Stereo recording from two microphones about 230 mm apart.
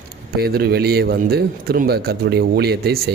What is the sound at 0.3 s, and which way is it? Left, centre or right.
A man's voice, right.